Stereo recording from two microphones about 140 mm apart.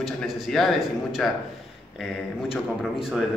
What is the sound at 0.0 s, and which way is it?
Speech, centre (ahead or behind).